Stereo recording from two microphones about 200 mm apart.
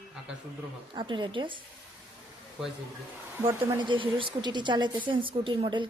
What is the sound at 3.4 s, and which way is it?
Speech, 20° right (ahead or behind).